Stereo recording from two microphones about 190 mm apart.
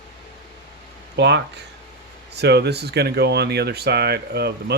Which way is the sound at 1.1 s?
65° right (ahead or behind).